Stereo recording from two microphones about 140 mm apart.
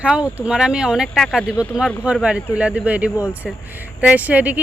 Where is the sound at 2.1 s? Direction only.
10° right (ahead or behind).